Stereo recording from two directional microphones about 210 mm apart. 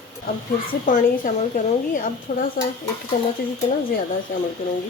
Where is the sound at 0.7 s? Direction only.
35° left (ahead or behind).